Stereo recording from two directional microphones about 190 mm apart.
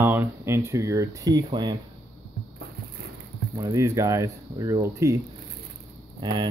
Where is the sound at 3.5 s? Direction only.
15° right (ahead or behind).